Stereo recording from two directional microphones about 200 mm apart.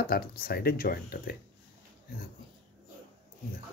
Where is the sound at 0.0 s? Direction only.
50° left (ahead or behind).